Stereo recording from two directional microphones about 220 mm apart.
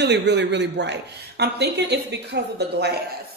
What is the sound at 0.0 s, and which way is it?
Speech, 50° right (ahead or behind).